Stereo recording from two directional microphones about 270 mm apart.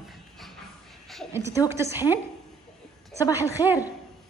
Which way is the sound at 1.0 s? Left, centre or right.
Centre.